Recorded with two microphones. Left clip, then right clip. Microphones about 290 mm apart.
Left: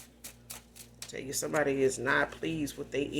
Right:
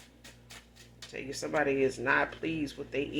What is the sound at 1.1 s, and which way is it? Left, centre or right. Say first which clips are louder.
Speech: even; left.